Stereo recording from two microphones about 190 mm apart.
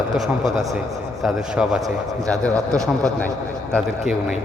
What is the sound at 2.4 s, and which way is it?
Speech, 15° right (ahead or behind).